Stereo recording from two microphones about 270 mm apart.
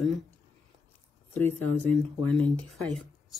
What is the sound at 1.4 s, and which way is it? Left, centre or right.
Speech, centre.